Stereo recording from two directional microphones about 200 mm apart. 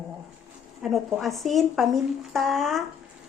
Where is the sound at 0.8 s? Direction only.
Centre (ahead or behind).